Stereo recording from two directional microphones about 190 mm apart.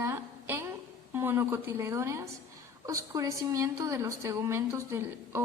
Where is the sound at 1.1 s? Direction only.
10° right (ahead or behind).